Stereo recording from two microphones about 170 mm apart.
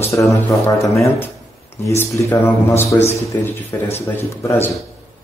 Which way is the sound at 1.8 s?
15° left (ahead or behind).